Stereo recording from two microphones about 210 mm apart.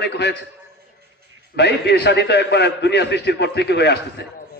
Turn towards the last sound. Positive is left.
turn(degrees=55)  # may be behind; listen again after turning